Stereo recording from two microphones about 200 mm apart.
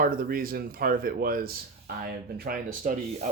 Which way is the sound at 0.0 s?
45° right (ahead or behind).